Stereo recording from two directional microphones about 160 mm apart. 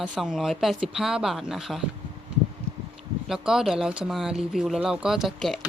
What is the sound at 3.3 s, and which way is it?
Speech, 5° right (ahead or behind).